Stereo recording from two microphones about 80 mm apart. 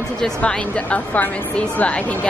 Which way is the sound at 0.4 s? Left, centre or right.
Centre.